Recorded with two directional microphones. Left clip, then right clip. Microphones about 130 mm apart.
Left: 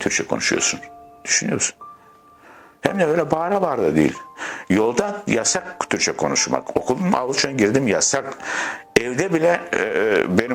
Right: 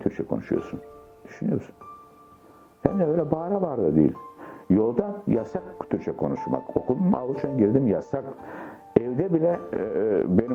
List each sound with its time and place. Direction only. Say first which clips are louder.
0.0 s speech: left 7 dB; 30° right (ahead or behind)
0.4 s speech: left 9 dB; 50° right (ahead or behind)
1.2 s speech: left 9 dB; 30° right (ahead or behind)
2.9 s speech: left 6 dB; 35° right (ahead or behind)